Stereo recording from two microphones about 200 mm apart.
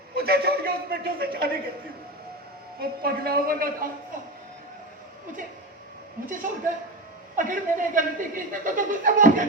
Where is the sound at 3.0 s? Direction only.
50° right (ahead or behind).